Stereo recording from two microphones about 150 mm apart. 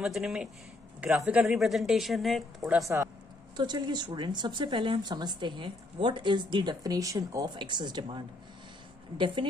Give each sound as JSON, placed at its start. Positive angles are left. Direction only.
{"t": 0.0, "sound": "speech", "side_deg": 0}
{"t": 3.5, "sound": "speech", "side_deg": -30}
{"t": 9.2, "sound": "a woman's voice", "side_deg": -30}